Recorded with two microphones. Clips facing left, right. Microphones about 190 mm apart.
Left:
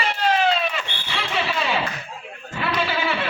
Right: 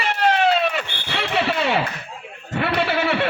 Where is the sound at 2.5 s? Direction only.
60° right (ahead or behind).